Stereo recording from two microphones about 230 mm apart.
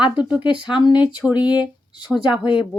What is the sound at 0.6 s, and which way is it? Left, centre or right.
Speech, centre.